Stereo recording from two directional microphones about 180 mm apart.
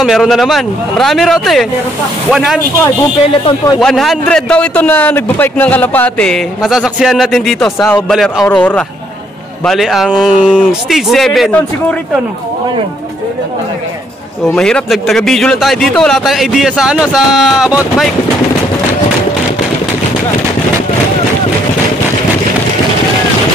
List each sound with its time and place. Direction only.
0.0 s a man's voice: centre (ahead or behind)
3.4 s a man's voice: 25° left (ahead or behind)
3.8 s a man's voice: centre (ahead or behind)
14.4 s a man's voice: 5° left (ahead or behind)